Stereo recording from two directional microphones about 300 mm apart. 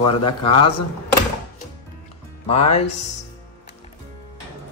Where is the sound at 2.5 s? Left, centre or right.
Left.